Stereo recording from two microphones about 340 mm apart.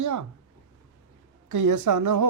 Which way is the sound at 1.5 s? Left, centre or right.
Right.